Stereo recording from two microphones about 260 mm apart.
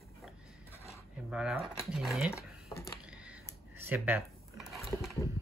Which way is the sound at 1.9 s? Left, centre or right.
Centre.